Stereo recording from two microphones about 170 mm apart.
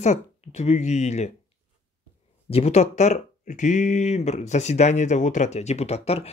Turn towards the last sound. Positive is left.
turn(degrees=35)  # may be behind; listen again after turning